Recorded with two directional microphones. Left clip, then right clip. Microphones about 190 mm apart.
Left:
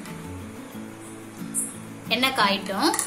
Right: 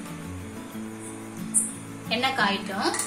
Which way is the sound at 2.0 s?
55° left (ahead or behind).